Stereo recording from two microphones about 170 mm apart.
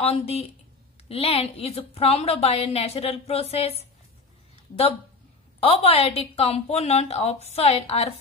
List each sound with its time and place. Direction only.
0.0 s a woman's voice: 35° left (ahead or behind)
5.6 s a woman's voice: 35° left (ahead or behind)